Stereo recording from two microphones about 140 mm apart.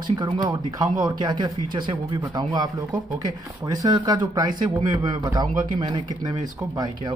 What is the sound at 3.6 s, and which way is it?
Speech, 25° right (ahead or behind).